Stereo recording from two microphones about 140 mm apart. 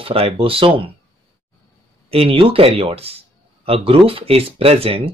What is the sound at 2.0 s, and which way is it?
Speech, 40° right (ahead or behind).